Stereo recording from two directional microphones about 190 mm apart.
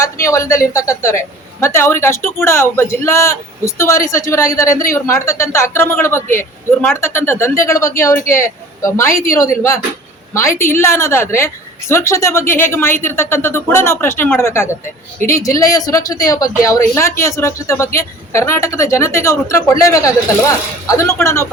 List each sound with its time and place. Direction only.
0.0 s a man's voice: 15° left (ahead or behind)